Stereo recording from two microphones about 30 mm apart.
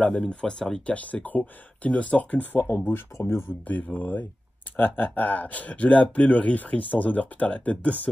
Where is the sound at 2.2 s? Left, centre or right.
Left.